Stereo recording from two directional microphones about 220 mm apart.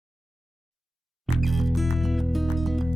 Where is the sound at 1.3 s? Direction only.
Centre (ahead or behind).